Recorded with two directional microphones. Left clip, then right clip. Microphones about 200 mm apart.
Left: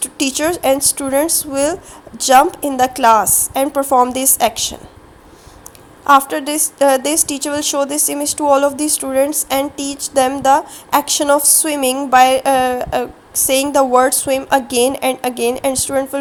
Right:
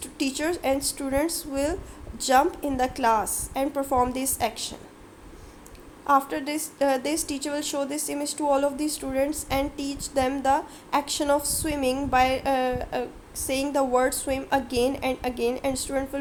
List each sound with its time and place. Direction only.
0.0 s a woman's voice: 25° left (ahead or behind)
6.1 s a woman's voice: 25° left (ahead or behind)